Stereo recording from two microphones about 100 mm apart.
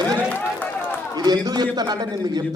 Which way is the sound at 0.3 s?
15° left (ahead or behind).